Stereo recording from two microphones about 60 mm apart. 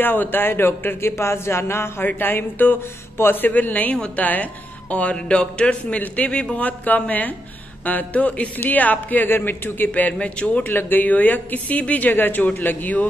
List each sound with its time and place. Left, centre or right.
0.0 s a man's voice: left